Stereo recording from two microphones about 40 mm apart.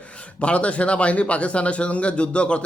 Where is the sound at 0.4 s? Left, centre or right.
Left.